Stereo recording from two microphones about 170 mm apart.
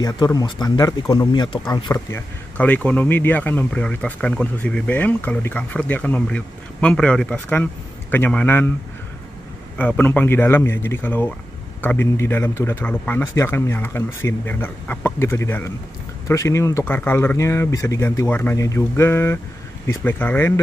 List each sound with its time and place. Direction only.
0.0 s speech: 20° left (ahead or behind)
2.1 s speech: 10° left (ahead or behind)
9.8 s speech: 10° left (ahead or behind)